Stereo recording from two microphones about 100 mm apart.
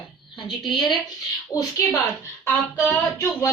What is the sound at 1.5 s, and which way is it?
Speech, 30° left (ahead or behind).